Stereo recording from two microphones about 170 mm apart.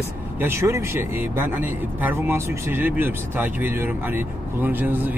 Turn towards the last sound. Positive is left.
turn(degrees=-10)  # may be behind; listen again after turning